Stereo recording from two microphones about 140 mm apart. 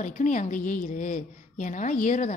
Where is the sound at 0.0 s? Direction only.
65° left (ahead or behind).